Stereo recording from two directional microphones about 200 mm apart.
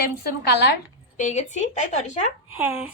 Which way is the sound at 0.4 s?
55° left (ahead or behind).